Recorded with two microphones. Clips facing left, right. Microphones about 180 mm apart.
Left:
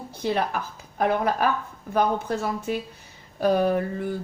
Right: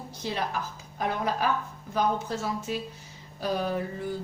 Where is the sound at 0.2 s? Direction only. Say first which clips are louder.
Left 6 dB; 55° left (ahead or behind).